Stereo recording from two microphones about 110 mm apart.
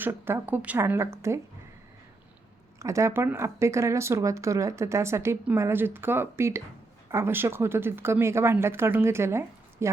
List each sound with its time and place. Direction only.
0.0 s speech: 20° right (ahead or behind)
2.7 s speech: 25° right (ahead or behind)